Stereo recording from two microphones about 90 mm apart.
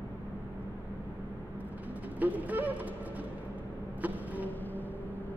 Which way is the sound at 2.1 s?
15° right (ahead or behind).